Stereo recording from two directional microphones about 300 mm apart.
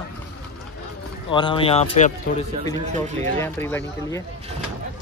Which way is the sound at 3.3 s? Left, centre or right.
Centre.